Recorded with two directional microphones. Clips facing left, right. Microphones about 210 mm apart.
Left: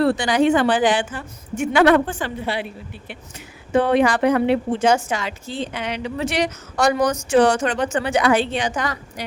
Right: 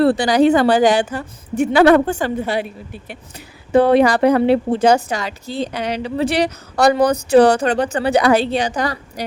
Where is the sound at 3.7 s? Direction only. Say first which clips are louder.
Right 4 dB; 35° right (ahead or behind).